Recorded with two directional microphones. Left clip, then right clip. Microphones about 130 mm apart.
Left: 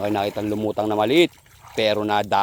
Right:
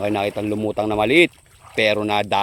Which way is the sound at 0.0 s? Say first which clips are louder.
Right 1 dB; 15° right (ahead or behind).